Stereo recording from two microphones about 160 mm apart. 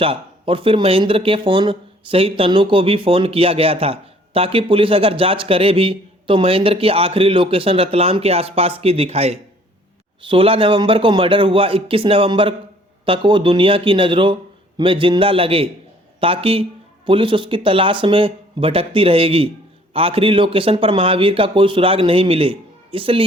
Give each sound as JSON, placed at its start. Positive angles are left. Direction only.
{"t": 0.0, "sound": "a man's voice", "side_deg": -35}